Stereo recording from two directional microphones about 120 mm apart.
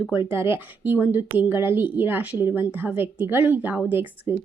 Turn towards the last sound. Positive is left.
turn(degrees=-15)  # may be behind; listen again after turning